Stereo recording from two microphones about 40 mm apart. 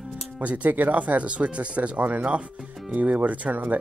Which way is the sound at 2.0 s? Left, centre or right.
Right.